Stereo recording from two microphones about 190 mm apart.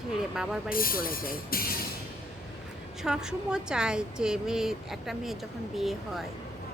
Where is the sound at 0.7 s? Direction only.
50° left (ahead or behind).